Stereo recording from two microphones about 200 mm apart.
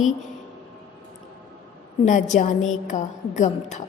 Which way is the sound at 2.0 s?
35° left (ahead or behind).